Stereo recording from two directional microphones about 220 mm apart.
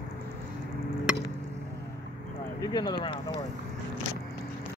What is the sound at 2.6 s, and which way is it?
Speech, 20° left (ahead or behind).